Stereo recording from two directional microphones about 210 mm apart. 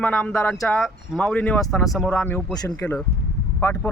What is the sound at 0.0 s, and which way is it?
Speech, 5° left (ahead or behind).